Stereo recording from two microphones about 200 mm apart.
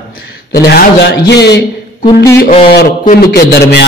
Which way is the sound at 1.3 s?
55° left (ahead or behind).